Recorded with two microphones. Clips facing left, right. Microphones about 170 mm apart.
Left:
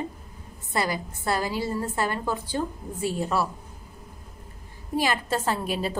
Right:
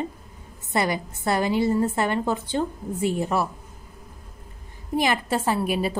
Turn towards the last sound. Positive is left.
turn(degrees=-10)  # may be behind; listen again after turning